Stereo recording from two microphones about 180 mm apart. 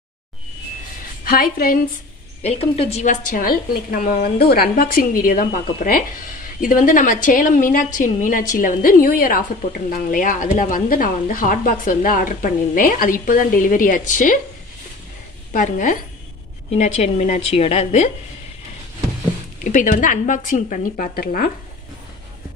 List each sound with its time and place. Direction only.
1.2 s a woman's voice: 55° left (ahead or behind)
2.4 s a woman's voice: 30° left (ahead or behind)
15.5 s a woman's voice: 50° left (ahead or behind)
16.7 s a woman's voice: 35° left (ahead or behind)
19.6 s a woman's voice: 45° left (ahead or behind)